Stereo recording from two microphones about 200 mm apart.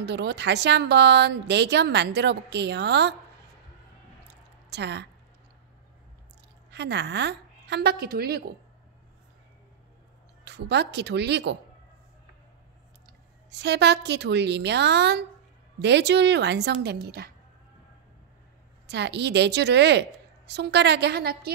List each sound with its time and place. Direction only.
0.0 s speech: 55° right (ahead or behind)
4.6 s speech: 60° right (ahead or behind)
6.7 s a woman's voice: 60° right (ahead or behind)
10.4 s speech: 55° right (ahead or behind)
13.5 s speech: 60° right (ahead or behind)
18.9 s speech: 60° right (ahead or behind)